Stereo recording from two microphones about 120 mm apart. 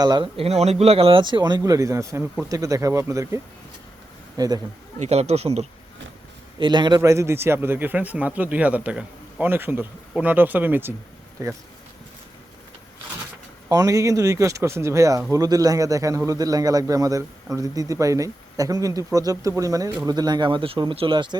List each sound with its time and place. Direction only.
0.0 s speech: 35° right (ahead or behind)
0.3 s a man's voice: 60° right (ahead or behind); by 4.6 s 30° right (ahead or behind)
4.9 s a man's voice: 65° right (ahead or behind)
6.6 s speech: 40° right (ahead or behind)
7.0 s a man's voice: 25° right (ahead or behind)
13.7 s a man's voice: 30° right (ahead or behind)